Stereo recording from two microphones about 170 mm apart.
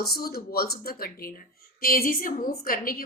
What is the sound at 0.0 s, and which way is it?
A woman's voice, 65° left (ahead or behind).